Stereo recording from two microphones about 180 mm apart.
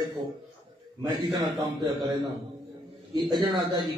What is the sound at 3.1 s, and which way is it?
Speech, 25° right (ahead or behind).